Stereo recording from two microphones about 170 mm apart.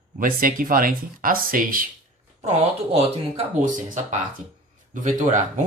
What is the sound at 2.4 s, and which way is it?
Speech, 35° right (ahead or behind).